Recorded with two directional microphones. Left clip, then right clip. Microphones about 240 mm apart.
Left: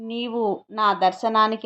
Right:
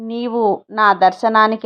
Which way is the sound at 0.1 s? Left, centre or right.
Right.